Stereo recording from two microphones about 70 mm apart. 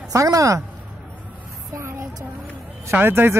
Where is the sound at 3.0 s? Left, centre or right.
Right.